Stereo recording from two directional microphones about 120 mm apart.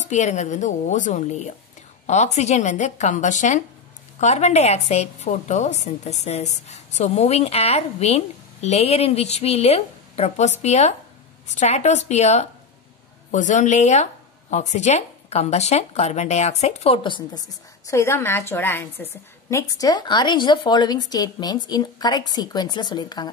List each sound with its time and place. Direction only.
0.0 s a woman's voice: 75° left (ahead or behind)
4.2 s a woman's voice: 70° left (ahead or behind)
13.3 s a woman's voice: 90° left; by 17.4 s 45° left (ahead or behind)
17.8 s a woman's voice: 25° left (ahead or behind)
19.5 s a woman's voice: 30° left (ahead or behind)